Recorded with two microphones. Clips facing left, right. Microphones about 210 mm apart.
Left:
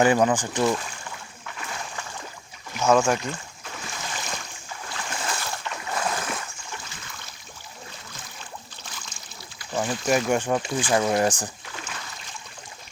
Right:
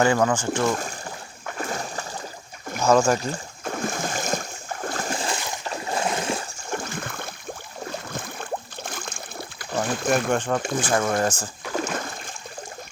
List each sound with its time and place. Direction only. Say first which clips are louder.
0.0 s speech: even; 15° left (ahead or behind)
0.6 s boat: even; 45° right (ahead or behind)
2.8 s speech: right 1 dB; centre (ahead or behind)
3.1 s boat: right 2 dB; 40° right (ahead or behind)
5.1 s boat: right 3 dB; 30° right (ahead or behind)
6.7 s a sound: right 10 dB; 50° right (ahead or behind)
7.9 s boat: right 11 dB; 55° right (ahead or behind)
9.8 s speech: even; 55° right (ahead or behind)
10.3 s speech: even; 10° left (ahead or behind)
10.6 s speech: even; 50° right (ahead or behind)
11.2 s speech: left 1 dB; 15° left (ahead or behind)
11.7 s splash: right 11 dB; 45° right (ahead or behind)